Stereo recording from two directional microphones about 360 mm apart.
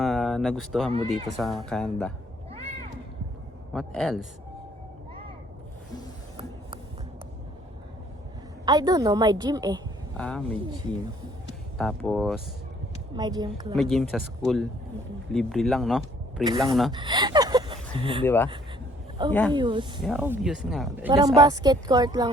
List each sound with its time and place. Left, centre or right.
0.0 s a sound: centre
1.4 s speech: centre
3.7 s speech: centre
8.6 s a woman's voice: centre
10.2 s speech: centre
11.8 s speech: centre
13.1 s a woman's voice: centre
13.7 s speech: centre
16.4 s a woman's voice: centre
19.3 s speech: centre
19.5 s a woman's voice: centre